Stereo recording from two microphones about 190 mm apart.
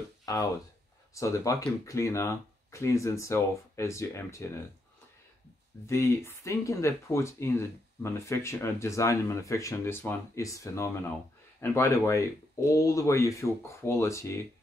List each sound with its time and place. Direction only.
0.2 s a sound: 15° left (ahead or behind)
1.1 s speech: 15° left (ahead or behind)
5.9 s speech: 15° left (ahead or behind)